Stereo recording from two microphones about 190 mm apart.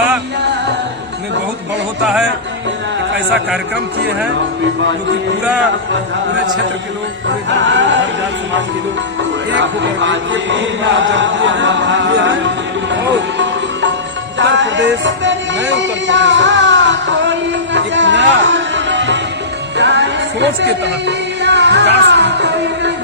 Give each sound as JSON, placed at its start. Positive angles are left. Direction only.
{"t": 7.5, "sound": "chant", "side_deg": -75}
{"t": 9.5, "sound": "chant", "side_deg": -75}
{"t": 12.9, "sound": "music", "side_deg": -75}